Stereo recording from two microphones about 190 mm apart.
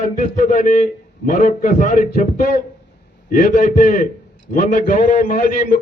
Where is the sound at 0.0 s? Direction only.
40° left (ahead or behind).